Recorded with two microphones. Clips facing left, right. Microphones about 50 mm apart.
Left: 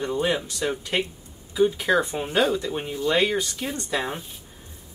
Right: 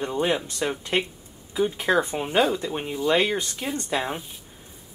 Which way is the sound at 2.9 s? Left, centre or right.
Centre.